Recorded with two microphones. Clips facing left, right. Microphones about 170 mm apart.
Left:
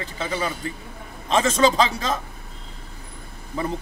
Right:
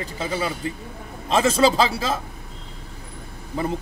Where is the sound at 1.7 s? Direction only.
5° right (ahead or behind).